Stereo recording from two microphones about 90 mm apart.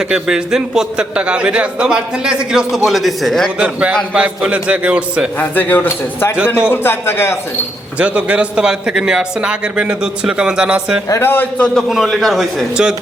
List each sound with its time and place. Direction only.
0.1 s a man's voice: 5° right (ahead or behind)
3.6 s a man's voice: 10° right (ahead or behind)
5.4 s a man's voice: 20° left (ahead or behind)
7.9 s a man's voice: 15° right (ahead or behind)
11.1 s a man's voice: 25° left (ahead or behind)
11.6 s a man's voice: 5° left (ahead or behind)